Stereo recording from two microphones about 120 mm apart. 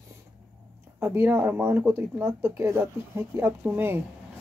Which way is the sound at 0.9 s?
20° right (ahead or behind).